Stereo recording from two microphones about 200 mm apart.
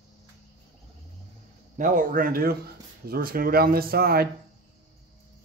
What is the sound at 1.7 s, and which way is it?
Speech, 40° right (ahead or behind).